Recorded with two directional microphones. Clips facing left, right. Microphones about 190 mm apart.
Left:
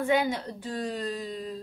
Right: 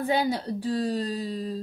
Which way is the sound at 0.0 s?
35° right (ahead or behind).